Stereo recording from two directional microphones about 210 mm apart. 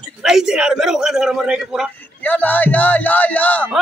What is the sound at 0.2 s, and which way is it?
A man's voice, centre (ahead or behind).